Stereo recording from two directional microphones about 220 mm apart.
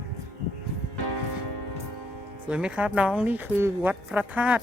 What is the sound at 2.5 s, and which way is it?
Speech, 5° right (ahead or behind).